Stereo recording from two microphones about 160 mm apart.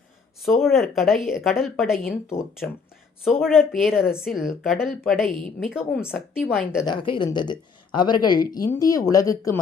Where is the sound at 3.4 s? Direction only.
5° right (ahead or behind).